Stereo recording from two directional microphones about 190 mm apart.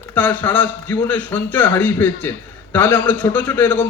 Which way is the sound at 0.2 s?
10° left (ahead or behind).